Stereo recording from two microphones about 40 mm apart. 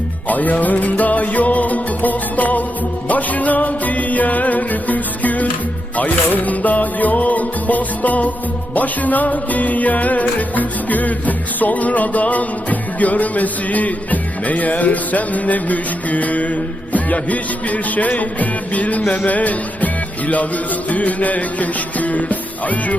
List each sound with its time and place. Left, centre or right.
0.3 s music: left